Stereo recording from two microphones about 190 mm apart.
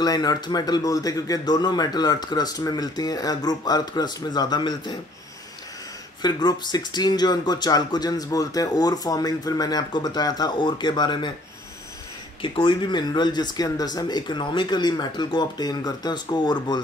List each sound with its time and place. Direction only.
0.0 s speech: 20° left (ahead or behind)
6.2 s speech: 20° left (ahead or behind)
12.4 s speech: 25° left (ahead or behind)